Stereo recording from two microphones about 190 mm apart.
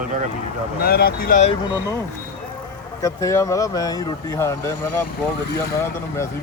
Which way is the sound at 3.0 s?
15° left (ahead or behind).